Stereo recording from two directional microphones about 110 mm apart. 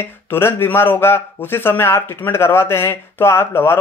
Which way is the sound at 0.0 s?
20° left (ahead or behind).